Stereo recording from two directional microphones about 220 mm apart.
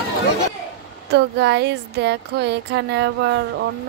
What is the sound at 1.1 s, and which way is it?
Speech, 50° right (ahead or behind).